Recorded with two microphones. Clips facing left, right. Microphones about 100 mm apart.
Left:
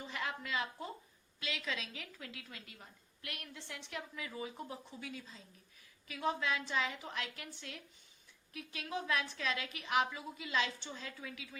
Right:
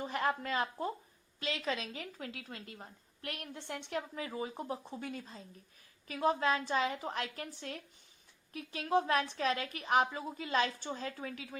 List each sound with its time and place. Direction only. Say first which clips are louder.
0.0 s a woman's voice: right 8 dB; 40° right (ahead or behind)